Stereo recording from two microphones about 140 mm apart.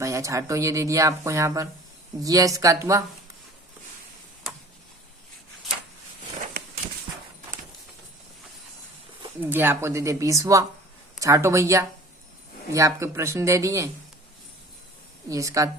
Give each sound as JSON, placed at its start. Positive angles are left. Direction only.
{"t": 0.0, "sound": "speech", "side_deg": -20}
{"t": 9.4, "sound": "speech", "side_deg": -15}
{"t": 15.3, "sound": "speech", "side_deg": -25}